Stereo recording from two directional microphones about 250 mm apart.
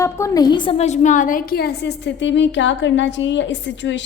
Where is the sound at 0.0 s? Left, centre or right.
Centre.